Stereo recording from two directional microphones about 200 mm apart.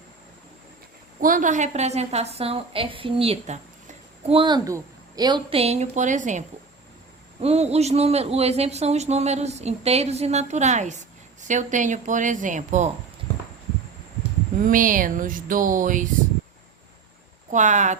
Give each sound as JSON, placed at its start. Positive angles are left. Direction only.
{"t": 1.2, "sound": "a man's voice", "side_deg": -40}
{"t": 7.4, "sound": "a man's voice", "side_deg": -30}
{"t": 14.6, "sound": "speech", "side_deg": -40}
{"t": 17.5, "sound": "a man's voice", "side_deg": -35}